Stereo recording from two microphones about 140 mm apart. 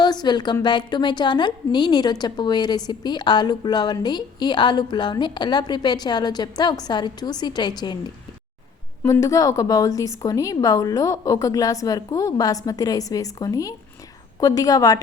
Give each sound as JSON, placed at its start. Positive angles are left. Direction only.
{"t": 0.0, "sound": "a woman's voice", "side_deg": 30}
{"t": 9.0, "sound": "a woman's voice", "side_deg": 25}